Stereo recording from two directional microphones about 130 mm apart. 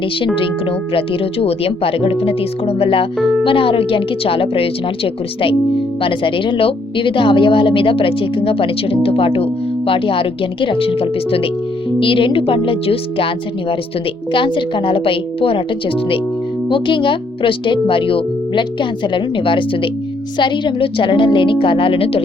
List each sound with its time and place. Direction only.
0.9 s a woman's voice: 45° left (ahead or behind)